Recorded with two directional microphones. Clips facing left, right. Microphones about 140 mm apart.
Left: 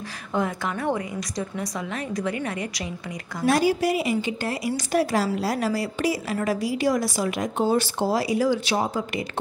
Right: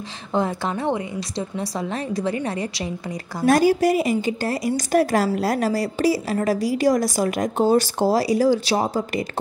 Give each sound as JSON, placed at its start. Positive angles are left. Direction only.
{"t": 0.3, "sound": "a woman's voice", "side_deg": -30}
{"t": 3.3, "sound": "speech", "side_deg": -45}